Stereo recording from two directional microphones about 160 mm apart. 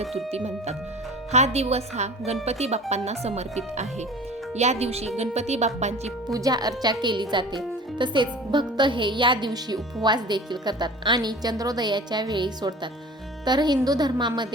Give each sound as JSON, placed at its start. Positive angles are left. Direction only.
{"t": 0.3, "sound": "speech", "side_deg": -40}
{"t": 6.3, "sound": "speech", "side_deg": -25}